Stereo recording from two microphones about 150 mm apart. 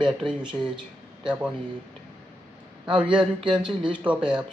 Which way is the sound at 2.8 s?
5° right (ahead or behind).